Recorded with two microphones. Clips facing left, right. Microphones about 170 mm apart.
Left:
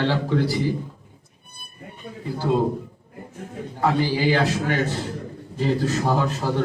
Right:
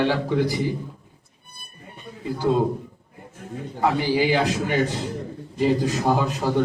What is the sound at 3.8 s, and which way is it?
A man's voice, 15° right (ahead or behind).